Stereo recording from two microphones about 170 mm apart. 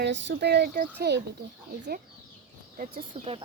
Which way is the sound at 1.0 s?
90° right.